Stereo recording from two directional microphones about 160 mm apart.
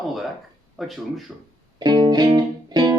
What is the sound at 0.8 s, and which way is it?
Speech, centre (ahead or behind).